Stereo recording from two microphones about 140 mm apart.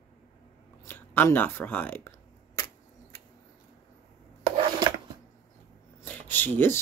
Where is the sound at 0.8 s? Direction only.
15° left (ahead or behind).